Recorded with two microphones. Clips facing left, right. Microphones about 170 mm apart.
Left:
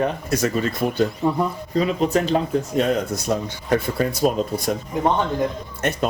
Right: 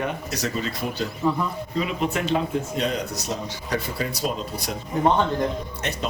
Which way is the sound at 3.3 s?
55° left (ahead or behind).